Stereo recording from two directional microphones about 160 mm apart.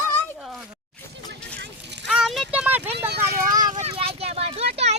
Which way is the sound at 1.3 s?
90° right.